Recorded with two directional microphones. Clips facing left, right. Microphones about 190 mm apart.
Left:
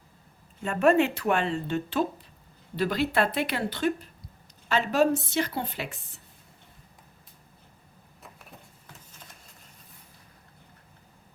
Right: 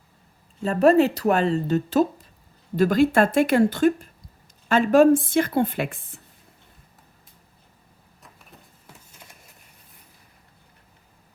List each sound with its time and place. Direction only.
0.6 s a woman's voice: 35° right (ahead or behind); by 6.1 s 55° right (ahead or behind)